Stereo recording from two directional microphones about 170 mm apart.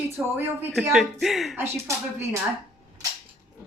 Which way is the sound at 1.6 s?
15° right (ahead or behind).